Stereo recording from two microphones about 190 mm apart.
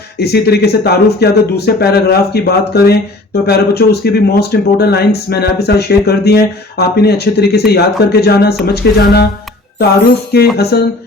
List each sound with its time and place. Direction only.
0.2 s speech: 60° left (ahead or behind)
10.3 s speech: 55° left (ahead or behind)